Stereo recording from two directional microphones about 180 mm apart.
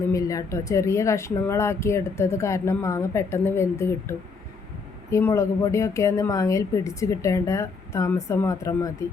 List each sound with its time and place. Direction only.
0.1 s speech: 20° left (ahead or behind)
5.1 s speech: 15° left (ahead or behind)